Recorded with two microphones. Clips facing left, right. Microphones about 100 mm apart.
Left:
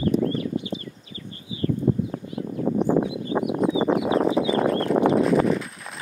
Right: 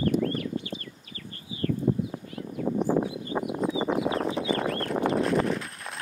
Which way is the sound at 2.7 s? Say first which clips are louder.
Left 4 dB; 70° left (ahead or behind).